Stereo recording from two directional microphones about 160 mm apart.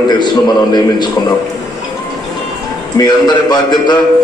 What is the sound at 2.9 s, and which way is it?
A man's voice, 25° left (ahead or behind).